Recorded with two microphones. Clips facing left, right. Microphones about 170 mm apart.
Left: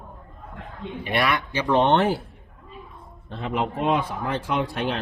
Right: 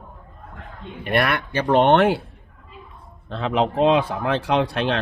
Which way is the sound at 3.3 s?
90° right.